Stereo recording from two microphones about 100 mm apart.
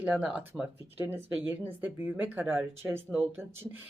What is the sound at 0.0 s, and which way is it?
Speech, 15° right (ahead or behind).